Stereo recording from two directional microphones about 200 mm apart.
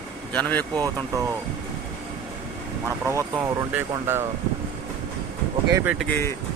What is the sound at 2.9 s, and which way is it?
Speech, 15° right (ahead or behind).